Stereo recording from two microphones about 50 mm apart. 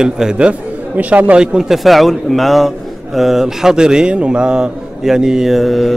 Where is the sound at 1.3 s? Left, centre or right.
Centre.